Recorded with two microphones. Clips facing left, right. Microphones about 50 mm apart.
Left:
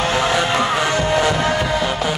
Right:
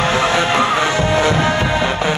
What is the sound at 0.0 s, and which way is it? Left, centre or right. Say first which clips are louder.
Music: right 2 dB; right.